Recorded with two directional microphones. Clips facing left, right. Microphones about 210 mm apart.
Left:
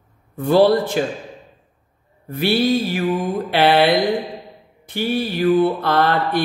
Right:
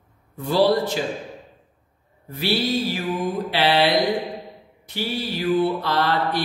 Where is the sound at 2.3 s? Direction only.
55° left (ahead or behind).